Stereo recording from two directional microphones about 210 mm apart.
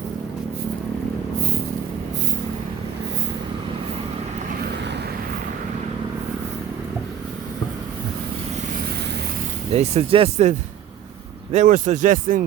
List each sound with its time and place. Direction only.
9.7 s speech: 30° right (ahead or behind)
11.5 s speech: 35° right (ahead or behind)